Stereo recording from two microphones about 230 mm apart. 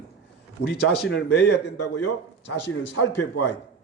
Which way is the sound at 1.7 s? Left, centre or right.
Left.